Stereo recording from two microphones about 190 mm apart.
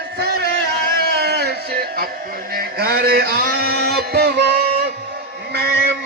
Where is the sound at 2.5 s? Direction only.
55° right (ahead or behind).